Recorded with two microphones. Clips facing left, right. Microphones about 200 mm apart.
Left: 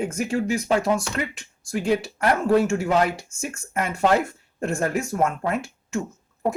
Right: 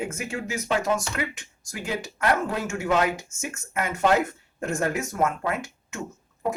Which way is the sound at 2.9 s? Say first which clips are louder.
Left 2 dB; 35° left (ahead or behind).